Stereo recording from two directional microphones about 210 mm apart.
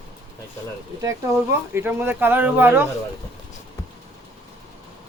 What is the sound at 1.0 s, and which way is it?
Speech, 15° right (ahead or behind).